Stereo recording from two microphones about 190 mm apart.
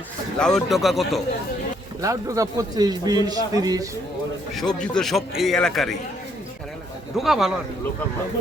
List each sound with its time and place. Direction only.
0.3 s a man's voice: 5° left (ahead or behind)
2.0 s a man's voice: 15° right (ahead or behind)
4.8 s a man's voice: centre (ahead or behind)
7.2 s a man's voice: centre (ahead or behind)